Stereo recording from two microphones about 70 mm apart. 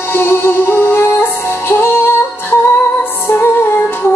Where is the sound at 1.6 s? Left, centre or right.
Left.